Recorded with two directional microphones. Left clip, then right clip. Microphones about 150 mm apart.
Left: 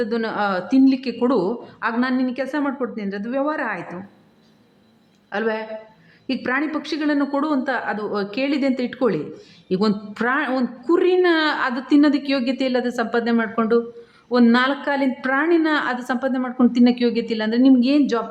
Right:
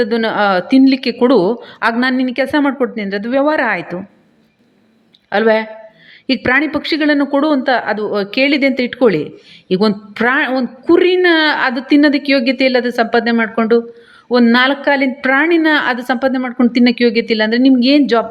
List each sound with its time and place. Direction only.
0.0 s a woman's voice: 25° right (ahead or behind)
5.3 s a woman's voice: 25° right (ahead or behind)